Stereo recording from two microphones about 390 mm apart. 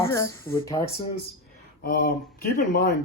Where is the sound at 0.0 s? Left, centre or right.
Centre.